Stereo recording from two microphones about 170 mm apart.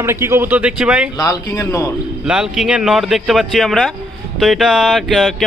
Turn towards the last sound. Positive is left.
turn(degrees=0)  # may be behind; listen again after turning